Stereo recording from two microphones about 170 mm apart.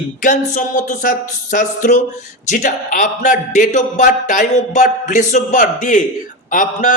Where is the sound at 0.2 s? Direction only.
50° left (ahead or behind).